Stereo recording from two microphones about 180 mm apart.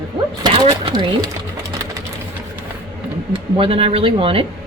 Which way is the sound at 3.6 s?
30° right (ahead or behind).